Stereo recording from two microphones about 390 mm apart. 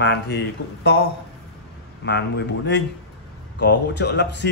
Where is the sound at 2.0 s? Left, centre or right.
Left.